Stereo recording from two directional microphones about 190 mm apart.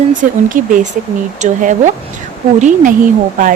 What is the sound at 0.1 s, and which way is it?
Speech, 45° right (ahead or behind).